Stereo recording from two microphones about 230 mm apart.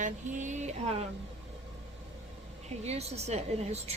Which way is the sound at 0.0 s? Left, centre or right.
Right.